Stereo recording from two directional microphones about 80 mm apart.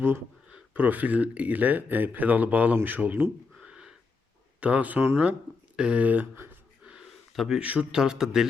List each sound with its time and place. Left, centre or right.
0.5 s speech: right
3.6 s a sound: centre
4.6 s speech: centre
5.7 s speech: centre
7.3 s speech: centre
7.6 s a man's voice: centre